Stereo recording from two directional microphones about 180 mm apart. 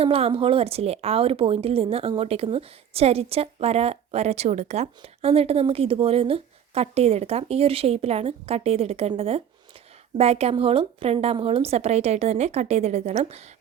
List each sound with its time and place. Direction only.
0.0 s speech: 30° right (ahead or behind)